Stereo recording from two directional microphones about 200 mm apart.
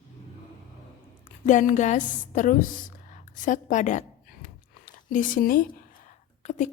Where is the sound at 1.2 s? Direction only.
40° left (ahead or behind).